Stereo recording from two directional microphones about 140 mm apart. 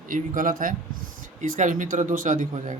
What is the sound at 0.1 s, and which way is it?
Speech, 75° right (ahead or behind).